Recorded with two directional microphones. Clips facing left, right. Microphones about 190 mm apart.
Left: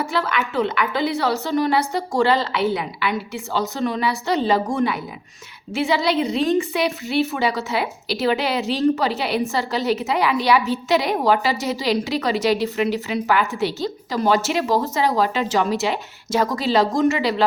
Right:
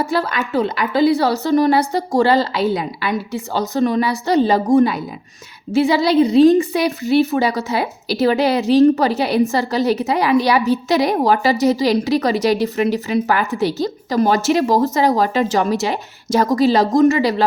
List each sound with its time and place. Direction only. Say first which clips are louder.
0.1 s a woman's voice: right 4 dB; 35° right (ahead or behind)